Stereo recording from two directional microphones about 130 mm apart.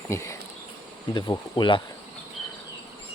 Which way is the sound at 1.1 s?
30° left (ahead or behind).